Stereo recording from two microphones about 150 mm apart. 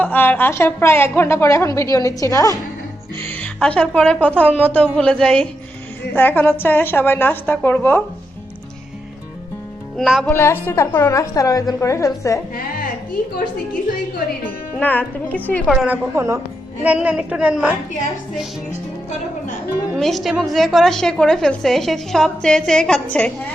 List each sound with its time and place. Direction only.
0.0 s a woman's voice: 15° left (ahead or behind)
3.2 s a woman's voice: 10° left (ahead or behind)
10.0 s a woman's voice: centre (ahead or behind)
10.2 s a woman's voice: 15° left (ahead or behind)
14.8 s a woman's voice: 10° left (ahead or behind)
15.6 s a woman's voice: centre (ahead or behind)
16.1 s a woman's voice: 20° right (ahead or behind)
20.0 s a woman's voice: centre (ahead or behind)